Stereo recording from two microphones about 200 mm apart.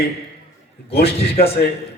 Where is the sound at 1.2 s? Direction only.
50° left (ahead or behind).